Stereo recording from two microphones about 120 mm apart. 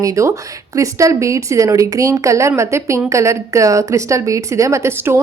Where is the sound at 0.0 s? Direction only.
25° right (ahead or behind).